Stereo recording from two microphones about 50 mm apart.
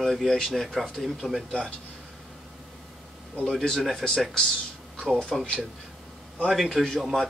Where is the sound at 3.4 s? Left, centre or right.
Centre.